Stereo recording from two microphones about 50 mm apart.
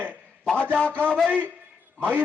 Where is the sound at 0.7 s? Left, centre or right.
Left.